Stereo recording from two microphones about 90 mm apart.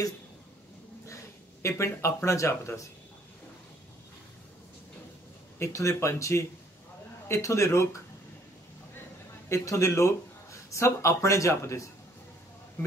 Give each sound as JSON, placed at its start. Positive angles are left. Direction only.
{"t": 1.0, "sound": "a sound", "side_deg": 35}
{"t": 2.2, "sound": "speech", "side_deg": 35}
{"t": 5.6, "sound": "speech", "side_deg": 35}
{"t": 9.5, "sound": "speech", "side_deg": 35}